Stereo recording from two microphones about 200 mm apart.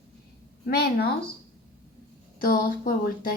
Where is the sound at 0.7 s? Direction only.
50° left (ahead or behind).